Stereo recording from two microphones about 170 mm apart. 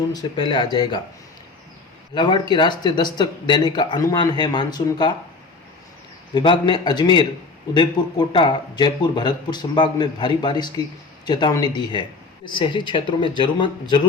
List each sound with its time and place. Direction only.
0.1 s speech: 25° left (ahead or behind)
2.1 s speech: 25° left (ahead or behind)
6.3 s speech: 25° left (ahead or behind)